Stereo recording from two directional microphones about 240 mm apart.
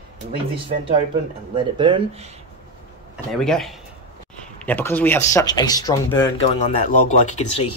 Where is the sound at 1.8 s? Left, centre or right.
Right.